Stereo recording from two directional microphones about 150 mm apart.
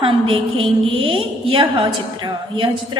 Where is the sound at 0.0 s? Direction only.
35° right (ahead or behind).